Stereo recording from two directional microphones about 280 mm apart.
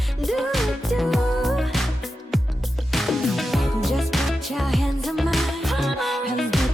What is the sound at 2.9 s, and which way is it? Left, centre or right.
Music, centre.